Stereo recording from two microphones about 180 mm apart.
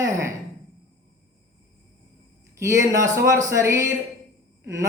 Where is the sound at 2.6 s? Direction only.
15° right (ahead or behind).